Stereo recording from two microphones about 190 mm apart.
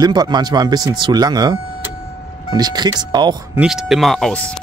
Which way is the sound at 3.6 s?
Centre (ahead or behind).